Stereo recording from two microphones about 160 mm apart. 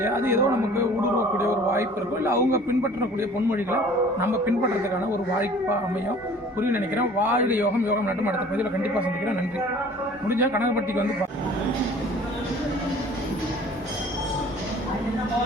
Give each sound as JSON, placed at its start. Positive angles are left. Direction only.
{"t": 0.0, "sound": "a man's voice", "side_deg": -15}
{"t": 6.6, "sound": "a man's voice", "side_deg": -15}
{"t": 10.2, "sound": "a man's voice", "side_deg": -15}